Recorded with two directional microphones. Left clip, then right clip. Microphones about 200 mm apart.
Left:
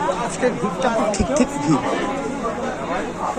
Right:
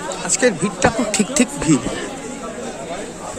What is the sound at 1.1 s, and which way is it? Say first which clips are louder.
Speech: even; 50° right (ahead or behind).